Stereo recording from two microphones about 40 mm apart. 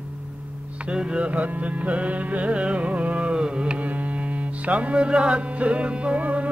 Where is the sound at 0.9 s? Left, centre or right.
Right.